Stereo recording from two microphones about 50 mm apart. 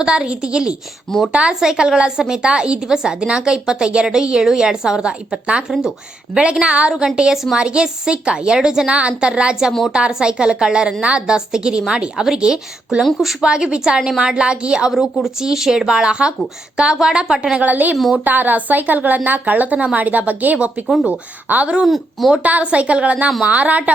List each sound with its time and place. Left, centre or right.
0.0 s a woman's voice: centre
13.0 s speech: centre
13.4 s a woman's voice: centre
17.6 s a woman's voice: right
21.8 s speech: centre
22.7 s a woman's voice: right